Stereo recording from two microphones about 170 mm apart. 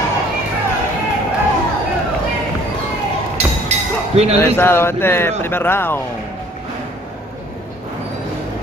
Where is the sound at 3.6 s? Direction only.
40° right (ahead or behind).